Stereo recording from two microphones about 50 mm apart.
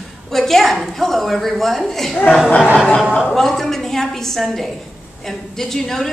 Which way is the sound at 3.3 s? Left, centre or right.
Centre.